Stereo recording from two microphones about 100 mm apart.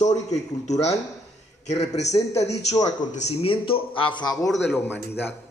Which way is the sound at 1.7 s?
90° left.